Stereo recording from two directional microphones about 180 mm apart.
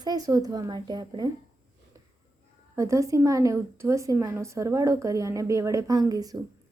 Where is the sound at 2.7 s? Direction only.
15° right (ahead or behind).